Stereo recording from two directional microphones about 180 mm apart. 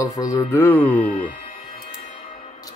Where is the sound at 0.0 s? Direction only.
20° left (ahead or behind).